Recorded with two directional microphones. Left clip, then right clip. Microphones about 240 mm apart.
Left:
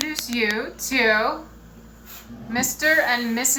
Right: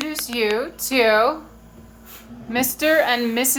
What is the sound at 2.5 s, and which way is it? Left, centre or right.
A woman's voice, right.